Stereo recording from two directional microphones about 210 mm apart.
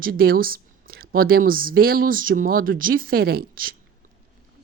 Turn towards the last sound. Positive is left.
turn(degrees=-45)  # may be behind; listen again after turning